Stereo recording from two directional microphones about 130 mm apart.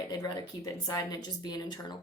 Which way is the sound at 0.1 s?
25° left (ahead or behind).